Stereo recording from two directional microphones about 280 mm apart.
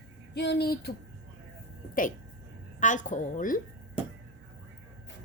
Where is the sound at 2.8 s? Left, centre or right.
Left.